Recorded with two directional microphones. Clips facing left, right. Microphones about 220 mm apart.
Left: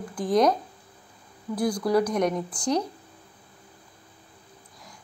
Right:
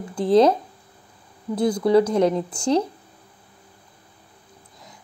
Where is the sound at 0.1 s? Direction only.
25° right (ahead or behind).